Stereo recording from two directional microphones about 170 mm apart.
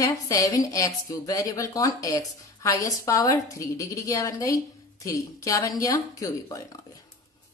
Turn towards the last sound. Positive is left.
turn(degrees=20)  # may be behind; listen again after turning